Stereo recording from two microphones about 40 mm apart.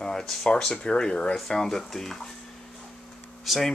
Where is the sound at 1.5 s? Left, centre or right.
Centre.